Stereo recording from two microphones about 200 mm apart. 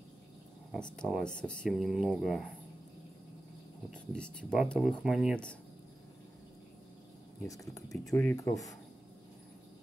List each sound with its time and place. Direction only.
0.7 s speech: 5° left (ahead or behind)
4.1 s speech: 5° left (ahead or behind)
7.4 s speech: 15° left (ahead or behind)